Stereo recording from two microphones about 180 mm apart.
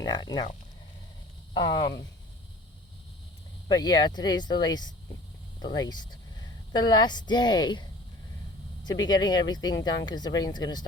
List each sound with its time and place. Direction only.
0.0 s speech: 25° left (ahead or behind)
1.5 s speech: 25° left (ahead or behind)
3.7 s a woman's voice: 25° left (ahead or behind)
9.0 s speech: 25° left (ahead or behind)